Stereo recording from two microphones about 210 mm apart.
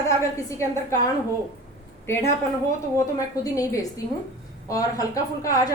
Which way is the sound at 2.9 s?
15° left (ahead or behind).